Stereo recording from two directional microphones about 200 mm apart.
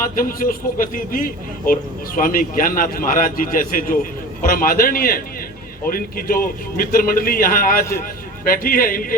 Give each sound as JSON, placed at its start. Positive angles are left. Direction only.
{"t": 0.2, "sound": "a man's voice", "side_deg": 45}